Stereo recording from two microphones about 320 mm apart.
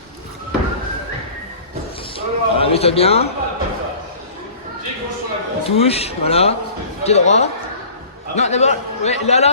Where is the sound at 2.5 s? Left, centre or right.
Centre.